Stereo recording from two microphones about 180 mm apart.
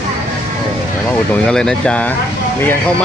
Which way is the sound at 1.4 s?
5° left (ahead or behind).